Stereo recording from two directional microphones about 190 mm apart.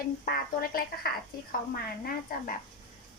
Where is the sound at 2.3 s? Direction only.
50° left (ahead or behind).